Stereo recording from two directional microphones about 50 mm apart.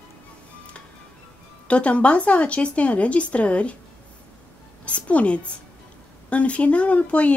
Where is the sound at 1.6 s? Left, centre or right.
Left.